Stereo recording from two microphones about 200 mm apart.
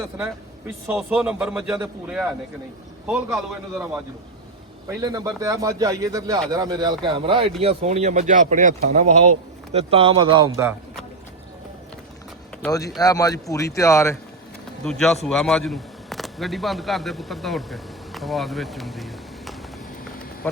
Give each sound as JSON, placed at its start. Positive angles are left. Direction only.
{"t": 0.9, "sound": "speech", "side_deg": -5}
{"t": 3.3, "sound": "speech", "side_deg": 0}
{"t": 4.9, "sound": "speech", "side_deg": -15}
{"t": 13.0, "sound": "speech", "side_deg": 20}
{"t": 14.8, "sound": "speech", "side_deg": 5}